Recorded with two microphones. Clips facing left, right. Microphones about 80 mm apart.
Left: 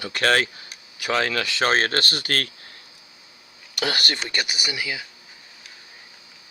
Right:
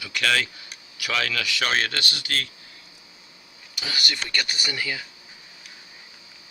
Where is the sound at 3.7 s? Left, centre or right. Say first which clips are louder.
Left 5 dB; left.